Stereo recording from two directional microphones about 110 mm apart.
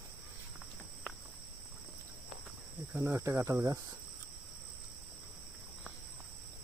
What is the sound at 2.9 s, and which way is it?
Cricket, 20° right (ahead or behind).